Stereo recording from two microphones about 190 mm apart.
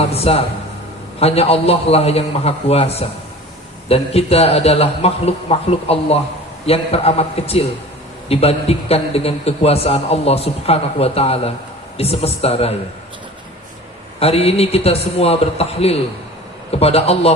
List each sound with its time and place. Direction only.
0.0 s a man's voice: 30° left (ahead or behind)
14.2 s a man's voice: 30° left (ahead or behind)